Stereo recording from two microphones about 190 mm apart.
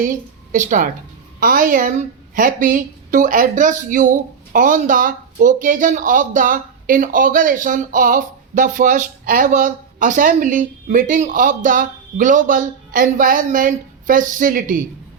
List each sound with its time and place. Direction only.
0.0 s a woman's voice: 40° right (ahead or behind)